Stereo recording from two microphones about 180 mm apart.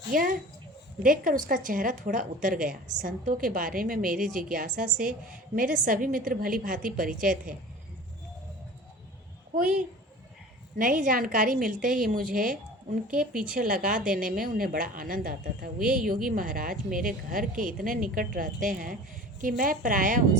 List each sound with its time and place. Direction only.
0.1 s a woman's voice: 50° right (ahead or behind)
10.8 s a woman's voice: 50° right (ahead or behind)
15.8 s a woman's voice: 5° right (ahead or behind)
16.0 s a woman's voice: 50° right (ahead or behind)